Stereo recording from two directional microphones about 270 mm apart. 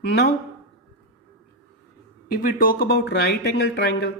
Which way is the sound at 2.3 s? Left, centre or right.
Left.